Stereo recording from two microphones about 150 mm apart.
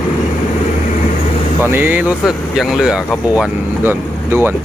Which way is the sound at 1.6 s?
15° right (ahead or behind).